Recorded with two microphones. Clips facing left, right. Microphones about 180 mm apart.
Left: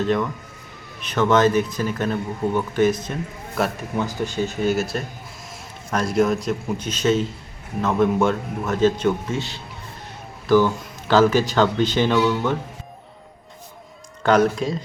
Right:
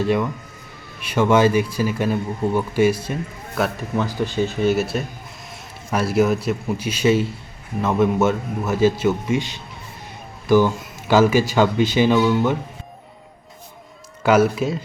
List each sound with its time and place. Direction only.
0.0 s speech: 10° right (ahead or behind)
14.3 s speech: 5° right (ahead or behind)